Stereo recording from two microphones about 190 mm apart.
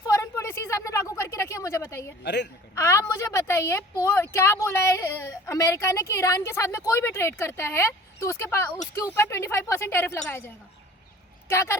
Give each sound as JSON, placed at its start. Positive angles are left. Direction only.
{"t": 0.1, "sound": "a sound", "side_deg": 15}
{"t": 2.2, "sound": "speech", "side_deg": 65}
{"t": 2.7, "sound": "a woman's voice", "side_deg": 15}